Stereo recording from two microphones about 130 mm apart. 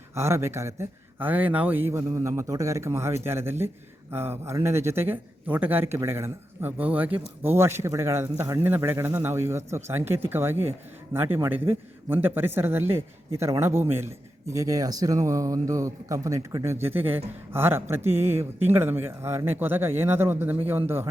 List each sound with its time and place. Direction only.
0.1 s speech: 20° right (ahead or behind)
16.7 s a man's voice: 15° right (ahead or behind)